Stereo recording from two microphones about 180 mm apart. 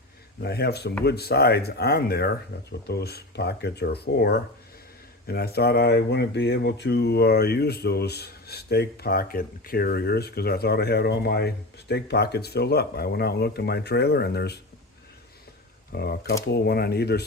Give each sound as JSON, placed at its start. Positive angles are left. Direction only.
{"t": 0.4, "sound": "speech", "side_deg": 65}
{"t": 15.9, "sound": "speech", "side_deg": 60}